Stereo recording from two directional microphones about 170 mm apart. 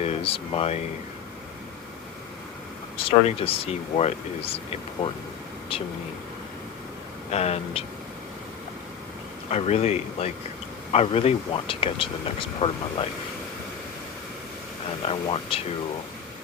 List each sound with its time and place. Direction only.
0.0 s speech: 35° left (ahead or behind)
3.1 s speech: 35° left (ahead or behind)
7.3 s speech: 40° left (ahead or behind)
9.5 s speech: 40° left (ahead or behind)
15.0 s speech: 35° left (ahead or behind)